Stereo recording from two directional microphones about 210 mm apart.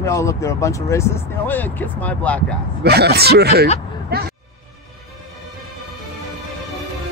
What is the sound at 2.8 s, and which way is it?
Speech, 50° right (ahead or behind).